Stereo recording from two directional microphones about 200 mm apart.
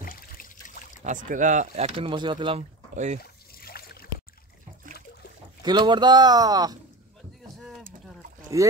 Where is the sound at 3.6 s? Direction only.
50° left (ahead or behind).